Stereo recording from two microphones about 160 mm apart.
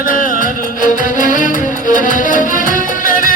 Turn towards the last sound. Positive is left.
turn(degrees=60)  # may be behind; listen again after turning